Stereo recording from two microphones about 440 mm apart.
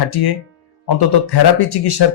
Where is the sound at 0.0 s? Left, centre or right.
Left.